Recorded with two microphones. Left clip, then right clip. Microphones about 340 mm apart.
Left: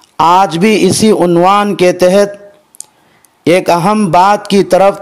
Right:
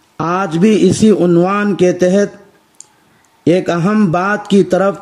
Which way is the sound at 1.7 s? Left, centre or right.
Centre.